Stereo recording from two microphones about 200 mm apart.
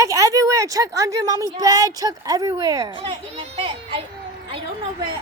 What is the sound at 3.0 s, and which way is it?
A child's voice, 30° right (ahead or behind).